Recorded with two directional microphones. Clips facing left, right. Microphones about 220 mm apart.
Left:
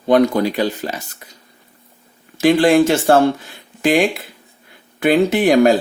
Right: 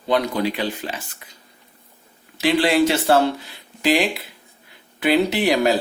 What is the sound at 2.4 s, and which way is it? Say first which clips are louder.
Speech: left 5 dB; 45° left (ahead or behind).